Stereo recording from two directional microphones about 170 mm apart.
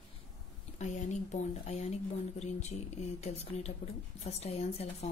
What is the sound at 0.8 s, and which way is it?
Speech, 45° left (ahead or behind).